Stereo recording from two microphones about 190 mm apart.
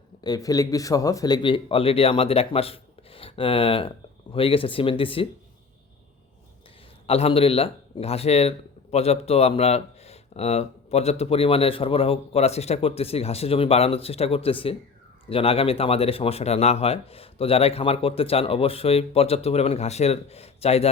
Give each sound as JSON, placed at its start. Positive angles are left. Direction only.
{"t": 0.2, "sound": "speech", "side_deg": 20}
{"t": 7.1, "sound": "a man's voice", "side_deg": 30}